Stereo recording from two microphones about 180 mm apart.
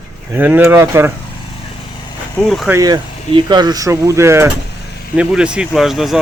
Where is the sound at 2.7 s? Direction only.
20° right (ahead or behind).